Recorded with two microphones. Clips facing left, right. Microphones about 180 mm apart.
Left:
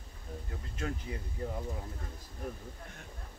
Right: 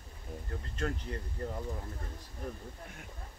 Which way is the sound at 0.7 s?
5° left (ahead or behind).